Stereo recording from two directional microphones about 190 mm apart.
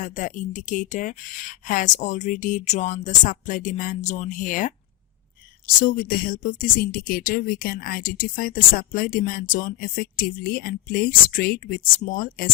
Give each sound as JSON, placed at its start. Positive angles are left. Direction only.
{"t": 0.0, "sound": "speech", "side_deg": 45}